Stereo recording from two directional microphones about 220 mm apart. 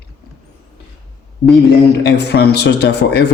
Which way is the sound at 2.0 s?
50° left (ahead or behind).